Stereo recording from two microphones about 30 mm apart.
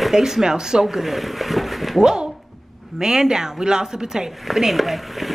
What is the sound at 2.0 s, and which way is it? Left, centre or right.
A woman's voice, right.